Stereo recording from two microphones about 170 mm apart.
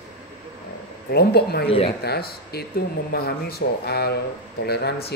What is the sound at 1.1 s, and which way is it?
A man's voice, 70° left (ahead or behind).